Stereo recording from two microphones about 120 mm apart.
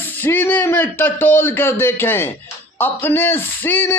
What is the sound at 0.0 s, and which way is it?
A man's voice, 15° left (ahead or behind).